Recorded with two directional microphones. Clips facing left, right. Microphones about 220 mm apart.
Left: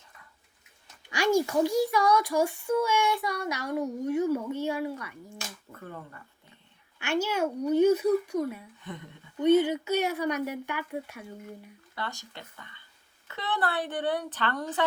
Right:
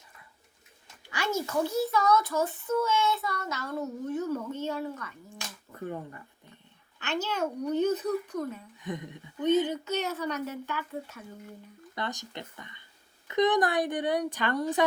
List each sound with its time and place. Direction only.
1.1 s a child's voice: 15° left (ahead or behind)
5.8 s speech: 20° right (ahead or behind)
7.0 s a child's voice: 10° left (ahead or behind)
8.8 s speech: 15° right (ahead or behind)
9.4 s a child's voice: 10° left (ahead or behind)
11.9 s speech: 20° right (ahead or behind)